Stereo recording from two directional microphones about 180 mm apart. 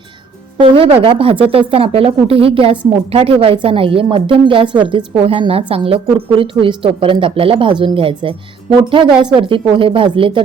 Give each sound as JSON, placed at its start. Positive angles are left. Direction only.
{"t": 0.6, "sound": "a woman's voice", "side_deg": -30}